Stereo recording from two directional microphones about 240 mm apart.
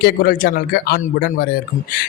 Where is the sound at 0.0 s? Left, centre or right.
Left.